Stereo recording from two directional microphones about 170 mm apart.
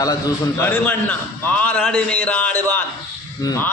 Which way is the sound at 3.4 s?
20° left (ahead or behind).